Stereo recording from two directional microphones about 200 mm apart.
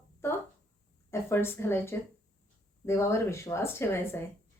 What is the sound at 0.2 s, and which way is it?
A woman's voice, 10° left (ahead or behind).